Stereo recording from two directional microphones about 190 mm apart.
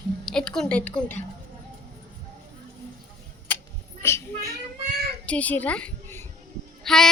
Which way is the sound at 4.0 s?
15° left (ahead or behind).